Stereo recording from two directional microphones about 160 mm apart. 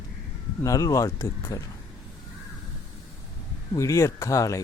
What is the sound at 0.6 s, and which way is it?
Speech, 20° left (ahead or behind).